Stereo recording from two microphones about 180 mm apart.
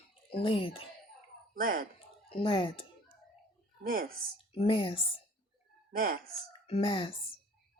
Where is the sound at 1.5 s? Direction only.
55° right (ahead or behind).